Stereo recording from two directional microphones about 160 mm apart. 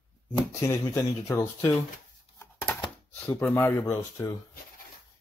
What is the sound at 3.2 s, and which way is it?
Speech, 10° left (ahead or behind).